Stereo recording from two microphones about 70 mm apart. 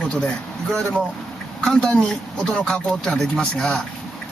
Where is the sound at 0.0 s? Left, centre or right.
Centre.